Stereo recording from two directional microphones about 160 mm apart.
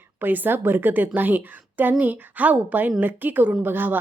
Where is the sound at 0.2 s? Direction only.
10° right (ahead or behind).